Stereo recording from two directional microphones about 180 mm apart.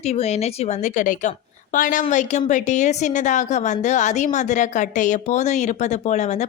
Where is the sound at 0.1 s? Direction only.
35° left (ahead or behind).